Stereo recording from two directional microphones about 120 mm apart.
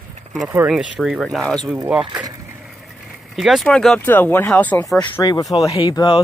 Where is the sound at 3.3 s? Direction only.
Centre (ahead or behind).